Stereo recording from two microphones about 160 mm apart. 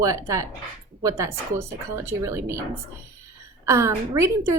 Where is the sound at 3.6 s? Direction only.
15° right (ahead or behind).